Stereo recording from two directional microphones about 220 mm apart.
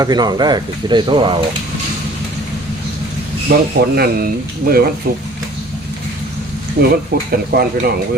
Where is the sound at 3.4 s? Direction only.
45° right (ahead or behind).